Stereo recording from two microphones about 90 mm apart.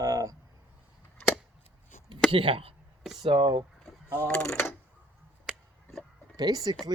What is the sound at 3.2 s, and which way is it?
Speech, 70° right (ahead or behind).